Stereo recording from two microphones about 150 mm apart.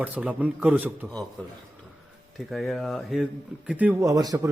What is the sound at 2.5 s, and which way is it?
Speech, centre (ahead or behind).